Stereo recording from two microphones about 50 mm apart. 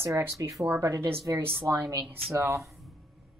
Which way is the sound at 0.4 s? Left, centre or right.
Right.